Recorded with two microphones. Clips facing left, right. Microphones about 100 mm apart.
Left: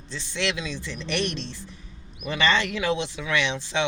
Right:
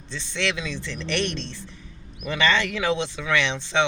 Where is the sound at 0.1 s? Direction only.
10° left (ahead or behind).